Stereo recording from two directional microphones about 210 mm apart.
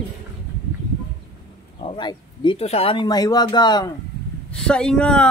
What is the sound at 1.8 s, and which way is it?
Speech, 25° left (ahead or behind).